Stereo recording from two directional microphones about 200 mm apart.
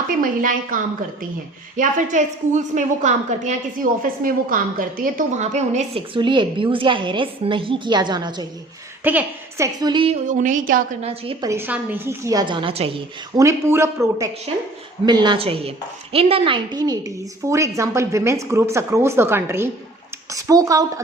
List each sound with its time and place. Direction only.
0.1 s a woman's voice: 45° right (ahead or behind)
6.1 s a woman's voice: 25° right (ahead or behind)
9.0 s a woman's voice: 10° right (ahead or behind)
9.8 s a woman's voice: 25° right (ahead or behind)
10.2 s a woman's voice: 40° right (ahead or behind)
11.0 s a woman's voice: 30° right (ahead or behind)
11.4 s a woman's voice: 10° right (ahead or behind); by 13.0 s 30° right (ahead or behind)
13.3 s a woman's voice: 15° right (ahead or behind)
15.0 s a woman's voice: 20° right (ahead or behind)